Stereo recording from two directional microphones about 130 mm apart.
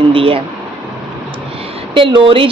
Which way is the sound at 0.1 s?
45° right (ahead or behind).